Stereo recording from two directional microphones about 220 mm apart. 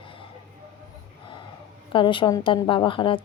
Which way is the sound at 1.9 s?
25° left (ahead or behind).